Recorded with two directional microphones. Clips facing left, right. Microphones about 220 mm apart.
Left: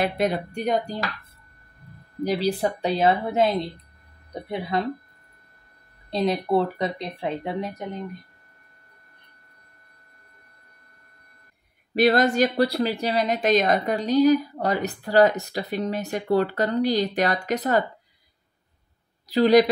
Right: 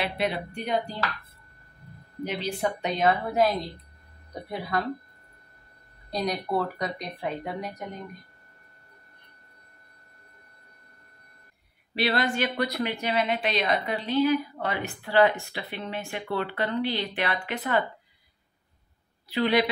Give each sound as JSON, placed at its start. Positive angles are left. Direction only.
{"t": 0.0, "sound": "speech", "side_deg": 45}
{"t": 2.2, "sound": "a woman's voice", "side_deg": 35}
{"t": 6.0, "sound": "speech", "side_deg": 25}
{"t": 11.9, "sound": "a woman's voice", "side_deg": 45}
{"t": 19.2, "sound": "speech", "side_deg": 40}